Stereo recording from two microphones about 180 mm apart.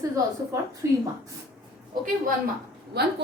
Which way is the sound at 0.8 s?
15° right (ahead or behind).